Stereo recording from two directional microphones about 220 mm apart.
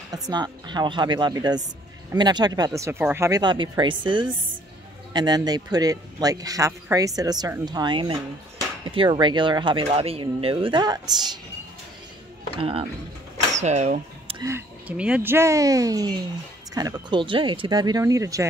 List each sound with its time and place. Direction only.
0.1 s a man's voice: 20° right (ahead or behind)
12.5 s speech: 25° right (ahead or behind)
14.4 s a man's voice: 10° right (ahead or behind)